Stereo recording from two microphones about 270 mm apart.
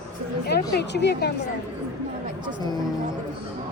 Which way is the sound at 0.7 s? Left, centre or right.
Left.